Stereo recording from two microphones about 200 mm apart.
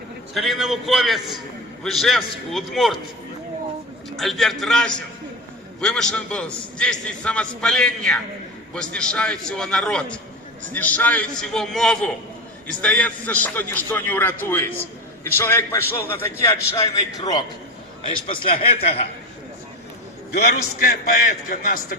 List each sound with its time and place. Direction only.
0.3 s a man's voice: centre (ahead or behind)
4.2 s a man's voice: centre (ahead or behind); by 17.4 s 20° left (ahead or behind)
18.3 s a man's voice: 30° left (ahead or behind)
20.3 s a man's voice: 50° left (ahead or behind)